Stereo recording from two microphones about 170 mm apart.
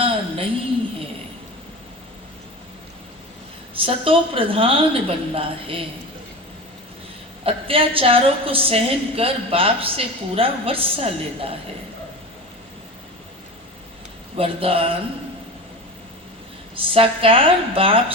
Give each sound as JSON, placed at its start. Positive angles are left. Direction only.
{"t": 0.0, "sound": "a sound", "side_deg": -35}
{"t": 3.8, "sound": "a woman's voice", "side_deg": -35}
{"t": 7.4, "sound": "a woman's voice", "side_deg": -35}
{"t": 14.3, "sound": "a woman's voice", "side_deg": -35}
{"t": 16.7, "sound": "a woman's voice", "side_deg": -30}